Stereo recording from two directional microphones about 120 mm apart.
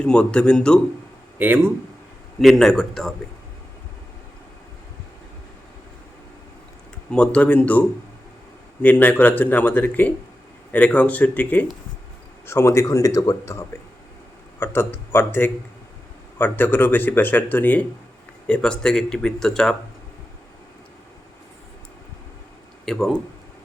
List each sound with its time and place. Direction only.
0.0 s speech: 10° left (ahead or behind)
1.4 s speech: 15° right (ahead or behind)
2.4 s speech: centre (ahead or behind)
7.1 s speech: 10° left (ahead or behind)
22.9 s speech: centre (ahead or behind)